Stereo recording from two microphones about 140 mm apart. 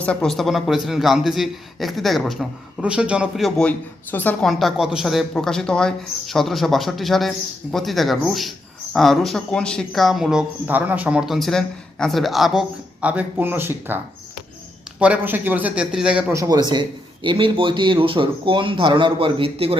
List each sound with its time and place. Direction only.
0.0 s speech: 5° left (ahead or behind)
3.7 s speech: 15° left (ahead or behind)
4.4 s speech: centre (ahead or behind)
16.3 s a man's voice: 25° right (ahead or behind); by 19.8 s 40° right (ahead or behind)